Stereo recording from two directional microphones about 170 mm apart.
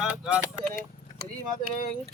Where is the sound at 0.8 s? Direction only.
60° right (ahead or behind).